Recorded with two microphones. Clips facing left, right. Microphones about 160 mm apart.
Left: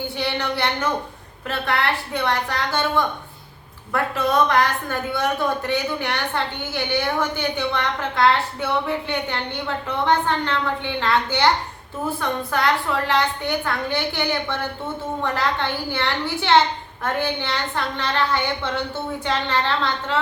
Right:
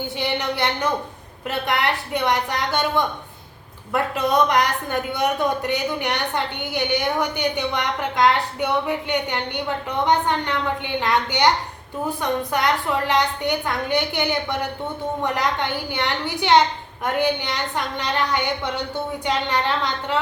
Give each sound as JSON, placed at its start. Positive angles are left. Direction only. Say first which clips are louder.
{"t": 0.2, "sound": "a woman's voice", "louder": "right 1 dB", "side_deg": -20}